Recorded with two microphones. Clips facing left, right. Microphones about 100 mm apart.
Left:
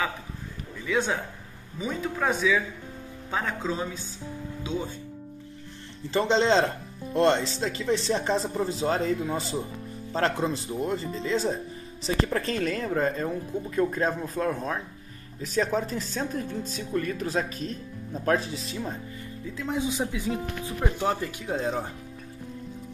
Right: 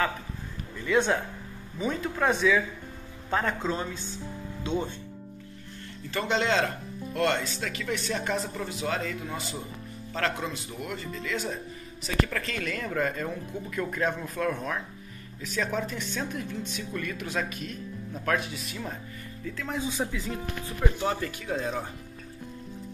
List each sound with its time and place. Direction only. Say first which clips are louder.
0.8 s speech: right 2 dB; centre (ahead or behind)
6.0 s speech: left 5 dB; 30° left (ahead or behind)
19.4 s speech: left 3 dB; 20° left (ahead or behind)
21.5 s speech: left 3 dB; 25° left (ahead or behind)